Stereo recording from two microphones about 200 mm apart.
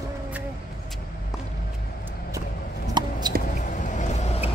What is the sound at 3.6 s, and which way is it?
Vehicle, 35° left (ahead or behind).